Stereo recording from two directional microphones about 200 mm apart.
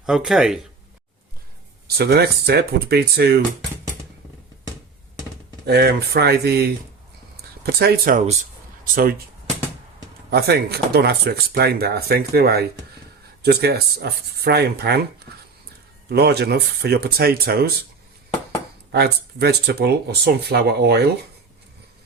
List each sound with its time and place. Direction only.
0.0 s speech: centre (ahead or behind)
2.0 s speech: 55° right (ahead or behind)
5.6 s speech: 55° right (ahead or behind)
10.3 s speech: 55° right (ahead or behind)
18.9 s speech: 55° right (ahead or behind)